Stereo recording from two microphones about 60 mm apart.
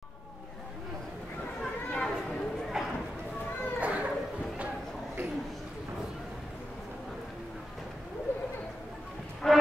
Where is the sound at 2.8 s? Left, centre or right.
Centre.